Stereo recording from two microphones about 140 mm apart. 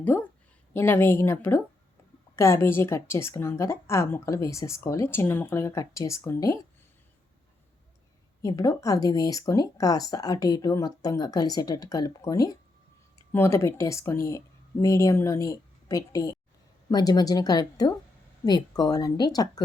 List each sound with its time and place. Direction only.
0.1 s a woman's voice: 20° left (ahead or behind)
8.4 s a woman's voice: 25° left (ahead or behind)